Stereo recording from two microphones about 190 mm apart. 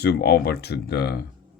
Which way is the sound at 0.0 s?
60° left (ahead or behind).